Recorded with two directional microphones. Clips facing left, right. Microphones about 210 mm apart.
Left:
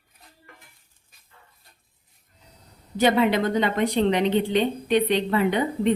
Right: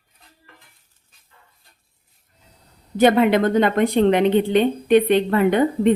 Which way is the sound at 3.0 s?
55° right (ahead or behind).